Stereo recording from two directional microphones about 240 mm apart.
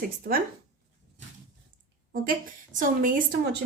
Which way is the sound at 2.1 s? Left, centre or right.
Right.